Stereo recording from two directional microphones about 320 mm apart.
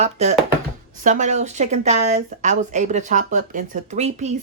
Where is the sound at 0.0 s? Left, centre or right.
Centre.